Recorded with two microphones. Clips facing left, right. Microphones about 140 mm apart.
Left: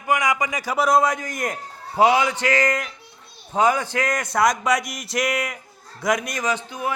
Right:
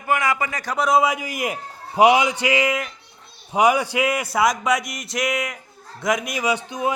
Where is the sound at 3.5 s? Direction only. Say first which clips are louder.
Right 2 dB; 10° right (ahead or behind).